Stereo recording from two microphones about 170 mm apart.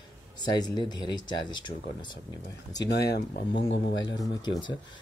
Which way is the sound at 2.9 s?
70° left (ahead or behind).